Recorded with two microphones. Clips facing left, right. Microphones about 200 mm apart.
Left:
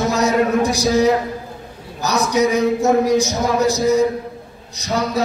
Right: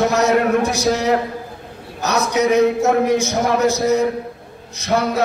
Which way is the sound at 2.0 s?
60° right (ahead or behind).